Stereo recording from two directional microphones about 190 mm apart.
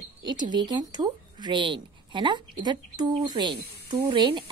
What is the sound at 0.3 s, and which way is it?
Speech, 25° right (ahead or behind).